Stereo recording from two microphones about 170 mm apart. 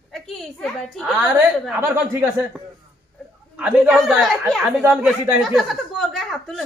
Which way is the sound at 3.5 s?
5° right (ahead or behind).